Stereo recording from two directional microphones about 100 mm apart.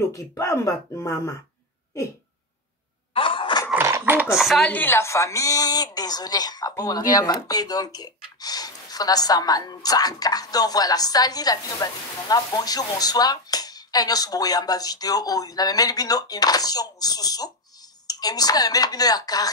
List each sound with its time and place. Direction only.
0.1 s speech: 30° left (ahead or behind)
3.1 s a sound: 60° left (ahead or behind)
3.7 s a sound: 25° right (ahead or behind)
4.0 s dishes: 15° right (ahead or behind)
4.4 s chopping: centre (ahead or behind)
4.6 s speech: 20° left (ahead or behind); by 19.5 s 40° left (ahead or behind)